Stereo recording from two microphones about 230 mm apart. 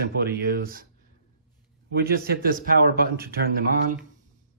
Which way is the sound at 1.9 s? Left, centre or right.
Right.